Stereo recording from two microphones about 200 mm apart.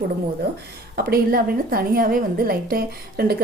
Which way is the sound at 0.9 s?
50° right (ahead or behind).